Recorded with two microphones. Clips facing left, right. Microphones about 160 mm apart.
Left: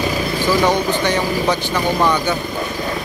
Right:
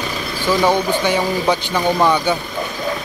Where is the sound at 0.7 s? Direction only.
10° right (ahead or behind).